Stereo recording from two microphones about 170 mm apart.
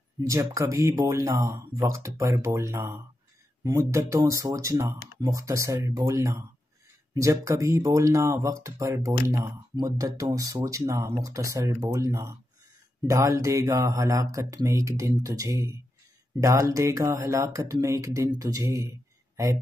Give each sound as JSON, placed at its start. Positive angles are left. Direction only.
{"t": 0.2, "sound": "speech", "side_deg": -20}
{"t": 4.9, "sound": "speech", "side_deg": 80}
{"t": 5.2, "sound": "speech", "side_deg": -20}